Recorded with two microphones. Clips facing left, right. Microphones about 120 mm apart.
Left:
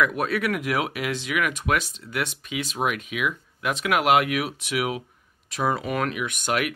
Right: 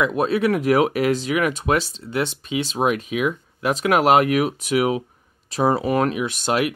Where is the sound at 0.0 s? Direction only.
25° right (ahead or behind).